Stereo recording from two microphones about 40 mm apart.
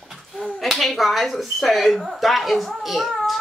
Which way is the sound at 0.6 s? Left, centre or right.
Centre.